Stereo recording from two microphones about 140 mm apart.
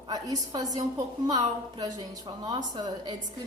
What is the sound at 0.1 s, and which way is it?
A woman's voice, 25° right (ahead or behind).